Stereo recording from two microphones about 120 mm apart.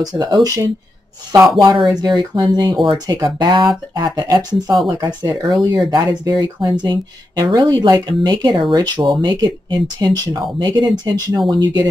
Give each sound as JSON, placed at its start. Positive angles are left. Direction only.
{"t": 0.0, "sound": "speech", "side_deg": -35}
{"t": 2.0, "sound": "speech", "side_deg": -35}